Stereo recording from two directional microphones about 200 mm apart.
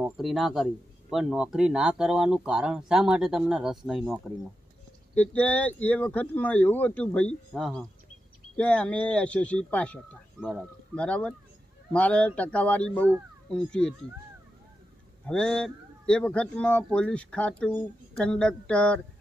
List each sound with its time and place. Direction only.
0.0 s a man's voice: centre (ahead or behind)
5.1 s speech: 5° left (ahead or behind)
11.0 s a man's voice: 5° left (ahead or behind)
15.2 s a man's voice: 5° left (ahead or behind)